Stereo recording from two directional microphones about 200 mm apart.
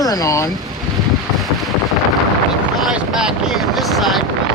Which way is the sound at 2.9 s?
5° right (ahead or behind).